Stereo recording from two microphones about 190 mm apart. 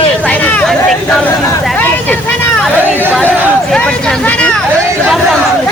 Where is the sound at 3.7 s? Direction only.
5° left (ahead or behind).